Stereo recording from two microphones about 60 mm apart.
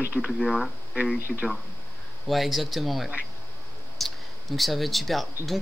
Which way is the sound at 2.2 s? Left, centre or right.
Centre.